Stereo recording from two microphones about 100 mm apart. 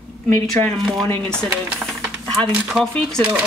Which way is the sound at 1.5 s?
10° right (ahead or behind).